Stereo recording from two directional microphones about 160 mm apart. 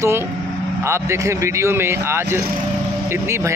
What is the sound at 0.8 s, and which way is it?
A man's voice, 15° right (ahead or behind).